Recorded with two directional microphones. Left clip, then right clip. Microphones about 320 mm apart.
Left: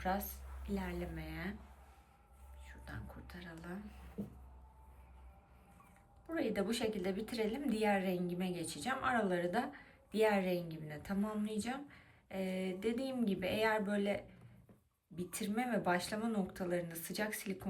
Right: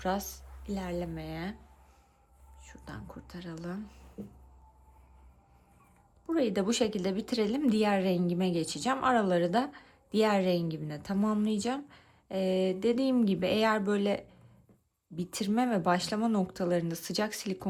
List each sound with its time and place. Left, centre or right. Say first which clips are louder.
0.0 s a woman's voice: right 5 dB; centre
2.6 s speech: right 6 dB; centre
6.3 s a woman's voice: right 8 dB; centre